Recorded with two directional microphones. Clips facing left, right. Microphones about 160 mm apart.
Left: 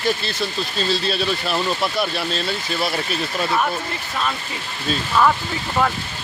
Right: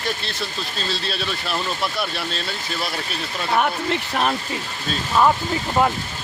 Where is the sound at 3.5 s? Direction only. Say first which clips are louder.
Right 2 dB; 60° right (ahead or behind).